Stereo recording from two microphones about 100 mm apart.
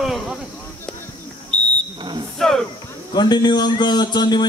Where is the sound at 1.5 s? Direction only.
10° left (ahead or behind).